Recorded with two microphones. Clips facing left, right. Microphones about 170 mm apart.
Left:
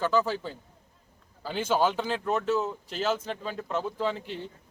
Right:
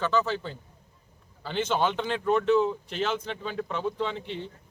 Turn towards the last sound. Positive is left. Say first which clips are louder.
# left 1 dB
turn(degrees=5)  # may be behind; listen again after turning